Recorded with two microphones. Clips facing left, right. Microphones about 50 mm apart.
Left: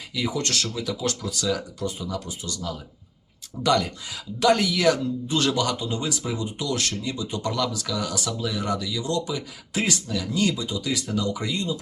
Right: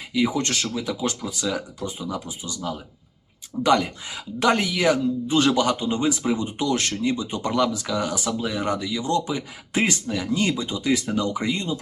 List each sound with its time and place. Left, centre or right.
0.1 s speech: right